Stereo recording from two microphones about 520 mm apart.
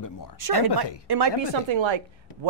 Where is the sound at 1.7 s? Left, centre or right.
Right.